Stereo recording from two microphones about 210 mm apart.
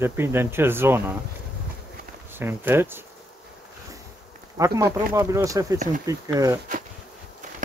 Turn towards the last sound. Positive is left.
turn(degrees=-15)  # may be behind; listen again after turning